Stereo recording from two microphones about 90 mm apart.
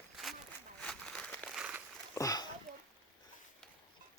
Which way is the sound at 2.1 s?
40° left (ahead or behind).